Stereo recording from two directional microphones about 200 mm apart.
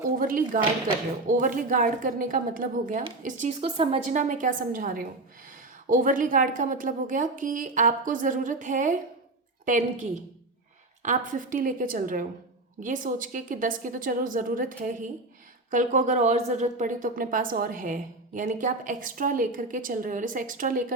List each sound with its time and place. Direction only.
0.2 s a woman's voice: 45° right (ahead or behind)